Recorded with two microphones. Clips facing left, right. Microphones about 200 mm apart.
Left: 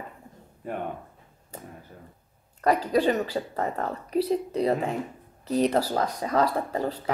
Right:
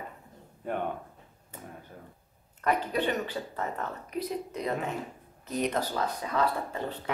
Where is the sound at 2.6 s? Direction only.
35° left (ahead or behind).